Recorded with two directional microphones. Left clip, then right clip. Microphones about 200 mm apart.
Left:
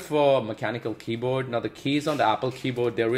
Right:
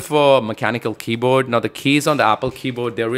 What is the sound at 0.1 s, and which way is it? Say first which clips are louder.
Speech: right 8 dB; 35° right (ahead or behind).